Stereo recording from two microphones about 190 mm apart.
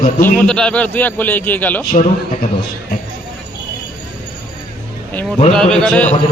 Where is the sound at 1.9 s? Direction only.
45° left (ahead or behind).